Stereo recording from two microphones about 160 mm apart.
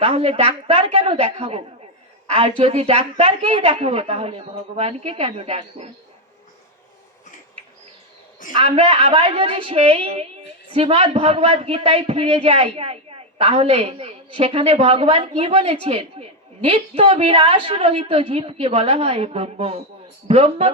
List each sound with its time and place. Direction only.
0.0 s a man's voice: 40° right (ahead or behind)
8.5 s a man's voice: 40° right (ahead or behind)